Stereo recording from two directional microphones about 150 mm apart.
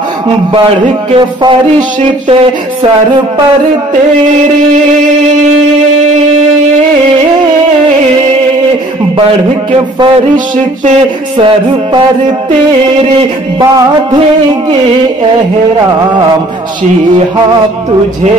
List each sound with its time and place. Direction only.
1.1 s speech: 30° right (ahead or behind)
11.3 s speech: 35° right (ahead or behind)